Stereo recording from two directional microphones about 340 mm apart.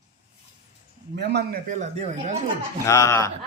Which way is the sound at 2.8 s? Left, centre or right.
Centre.